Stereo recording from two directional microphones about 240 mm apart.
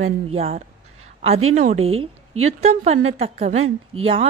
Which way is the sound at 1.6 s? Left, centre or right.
Right.